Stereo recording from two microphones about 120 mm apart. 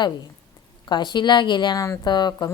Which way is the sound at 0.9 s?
40° left (ahead or behind).